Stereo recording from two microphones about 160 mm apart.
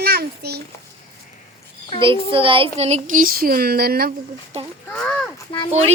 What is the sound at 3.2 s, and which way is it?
Speech, 65° right (ahead or behind).